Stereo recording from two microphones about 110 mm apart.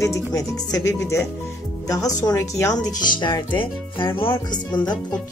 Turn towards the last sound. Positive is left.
turn(degrees=40)  # may be behind; listen again after turning